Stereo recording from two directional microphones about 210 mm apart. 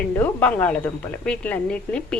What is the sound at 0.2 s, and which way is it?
A woman's voice, 5° left (ahead or behind).